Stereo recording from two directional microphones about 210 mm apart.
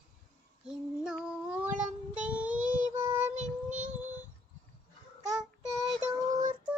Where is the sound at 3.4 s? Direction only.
35° right (ahead or behind).